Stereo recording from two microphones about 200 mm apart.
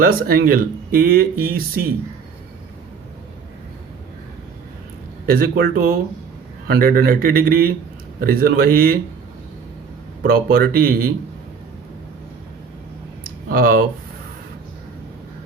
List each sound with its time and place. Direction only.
0.0 s speech: 45° right (ahead or behind)
5.2 s speech: 50° right (ahead or behind)
10.2 s speech: 50° right (ahead or behind)
13.2 s a sound: 45° right (ahead or behind)